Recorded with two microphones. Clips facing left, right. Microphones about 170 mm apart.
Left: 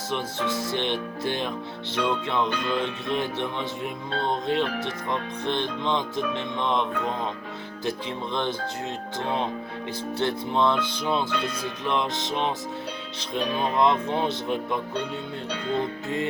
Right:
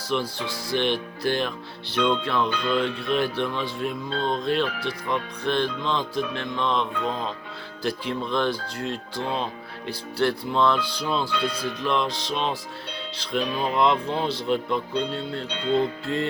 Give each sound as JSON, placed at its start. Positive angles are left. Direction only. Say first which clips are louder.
{"t": 0.1, "sound": "speech", "louder": "right 1 dB", "side_deg": 20}